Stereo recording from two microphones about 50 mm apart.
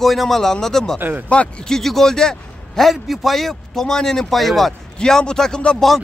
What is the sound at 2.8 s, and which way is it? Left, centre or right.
A man's voice, centre.